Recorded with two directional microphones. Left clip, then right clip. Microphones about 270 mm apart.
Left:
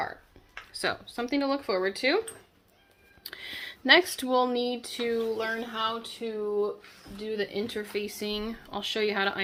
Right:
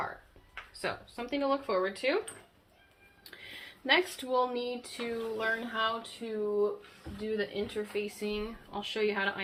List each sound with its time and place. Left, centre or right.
0.7 s speech: left
3.2 s speech: left